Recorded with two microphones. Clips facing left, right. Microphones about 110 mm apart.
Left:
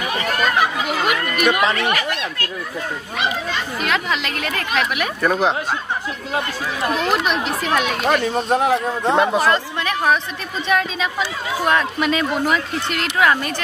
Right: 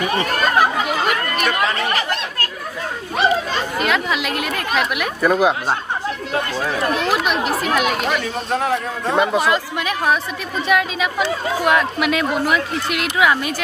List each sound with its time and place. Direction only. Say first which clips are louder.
0.1 s chatter: left 1 dB; 40° right (ahead or behind)
2.0 s speech: right 1 dB; 35° right (ahead or behind)
3.8 s a woman's voice: right 1 dB; centre (ahead or behind)
7.1 s a woman's voice: right 1 dB; centre (ahead or behind)
8.3 s a man's voice: left 3 dB; 25° left (ahead or behind)
9.1 s a woman's voice: even; centre (ahead or behind)